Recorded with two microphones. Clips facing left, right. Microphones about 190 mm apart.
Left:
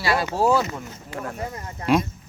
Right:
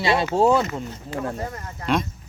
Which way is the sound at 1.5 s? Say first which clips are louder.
Left 6 dB; 15° left (ahead or behind).